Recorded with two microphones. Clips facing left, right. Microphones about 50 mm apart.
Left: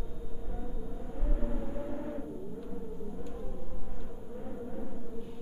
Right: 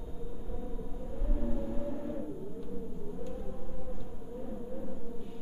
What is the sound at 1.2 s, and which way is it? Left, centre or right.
Vehicle, centre.